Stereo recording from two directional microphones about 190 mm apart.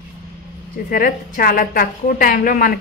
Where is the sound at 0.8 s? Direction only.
50° left (ahead or behind).